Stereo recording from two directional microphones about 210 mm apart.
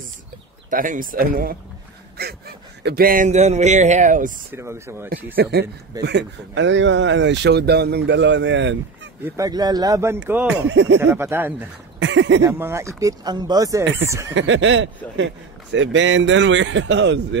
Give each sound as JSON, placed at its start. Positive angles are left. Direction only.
{"t": 0.7, "sound": "speech", "side_deg": -40}
{"t": 4.5, "sound": "speech", "side_deg": -10}
{"t": 5.1, "sound": "a man's voice", "side_deg": -50}
{"t": 9.2, "sound": "speech", "side_deg": -15}
{"t": 10.7, "sound": "a man's voice", "side_deg": -60}
{"t": 11.0, "sound": "speech", "side_deg": -10}
{"t": 12.0, "sound": "speech", "side_deg": -60}
{"t": 12.4, "sound": "speech", "side_deg": -10}
{"t": 14.3, "sound": "a man's voice", "side_deg": -60}